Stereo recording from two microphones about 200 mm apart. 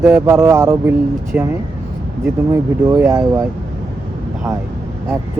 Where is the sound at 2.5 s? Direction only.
15° right (ahead or behind).